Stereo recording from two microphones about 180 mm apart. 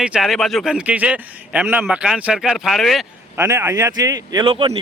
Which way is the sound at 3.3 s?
10° right (ahead or behind).